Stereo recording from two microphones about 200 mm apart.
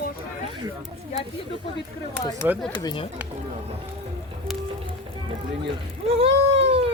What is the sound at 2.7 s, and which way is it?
Speech, 25° left (ahead or behind).